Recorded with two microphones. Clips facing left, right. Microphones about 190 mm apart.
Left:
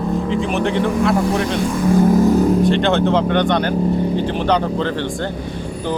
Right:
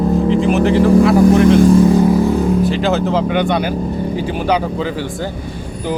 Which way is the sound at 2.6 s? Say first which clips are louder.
Even; 5° right (ahead or behind).